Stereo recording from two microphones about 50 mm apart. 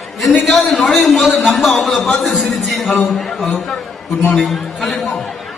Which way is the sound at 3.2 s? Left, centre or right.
Centre.